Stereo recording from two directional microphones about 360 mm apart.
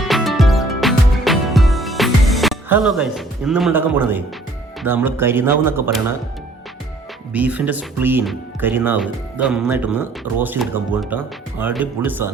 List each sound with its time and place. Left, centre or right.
0.1 s music: centre
4.8 s speech: centre
7.3 s speech: centre